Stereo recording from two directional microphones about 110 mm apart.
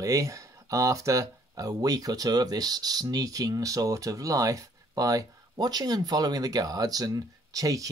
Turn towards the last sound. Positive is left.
turn(degrees=-30)  # may be behind; listen again after turning